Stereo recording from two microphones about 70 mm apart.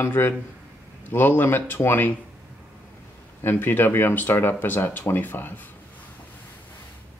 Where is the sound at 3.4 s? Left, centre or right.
Left.